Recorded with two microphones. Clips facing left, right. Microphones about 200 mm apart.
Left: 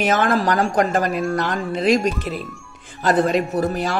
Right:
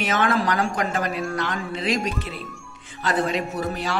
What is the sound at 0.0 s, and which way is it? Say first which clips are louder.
A woman's voice: left 4 dB; 40° left (ahead or behind).